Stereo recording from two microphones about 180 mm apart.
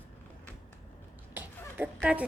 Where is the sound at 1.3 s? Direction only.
10° right (ahead or behind).